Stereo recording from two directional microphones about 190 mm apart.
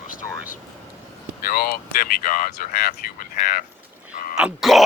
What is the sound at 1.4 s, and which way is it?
Speech, 50° left (ahead or behind).